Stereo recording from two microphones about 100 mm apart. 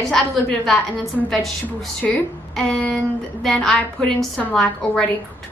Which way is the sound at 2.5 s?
10° left (ahead or behind).